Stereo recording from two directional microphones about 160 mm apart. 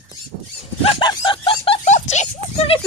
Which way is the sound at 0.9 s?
30° left (ahead or behind).